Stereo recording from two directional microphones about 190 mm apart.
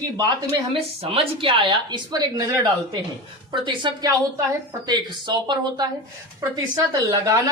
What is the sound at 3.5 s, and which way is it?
Speech, 25° right (ahead or behind).